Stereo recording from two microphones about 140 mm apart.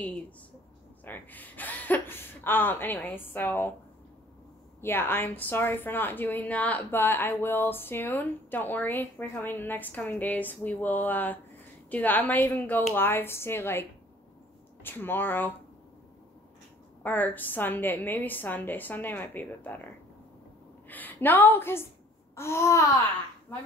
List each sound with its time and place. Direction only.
1.0 s a woman's voice: 15° left (ahead or behind)
4.8 s a woman's voice: 15° left (ahead or behind)
17.0 s a woman's voice: 10° left (ahead or behind)
20.9 s a woman's voice: 15° left (ahead or behind)
22.3 s babbling: 20° left (ahead or behind)